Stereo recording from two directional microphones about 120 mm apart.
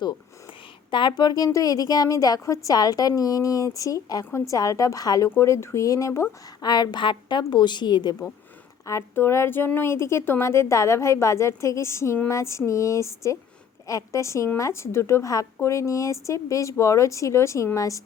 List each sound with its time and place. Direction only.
0.9 s a woman's voice: 40° left (ahead or behind)
8.9 s a woman's voice: 20° left (ahead or behind)